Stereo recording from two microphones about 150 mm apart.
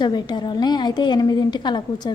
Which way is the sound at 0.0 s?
30° left (ahead or behind).